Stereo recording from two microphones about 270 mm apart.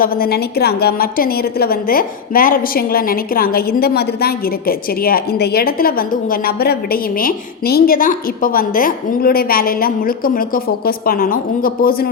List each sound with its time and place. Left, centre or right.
0.0 s a woman's voice: left